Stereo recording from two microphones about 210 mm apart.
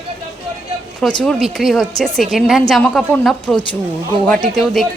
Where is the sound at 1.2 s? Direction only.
Centre (ahead or behind).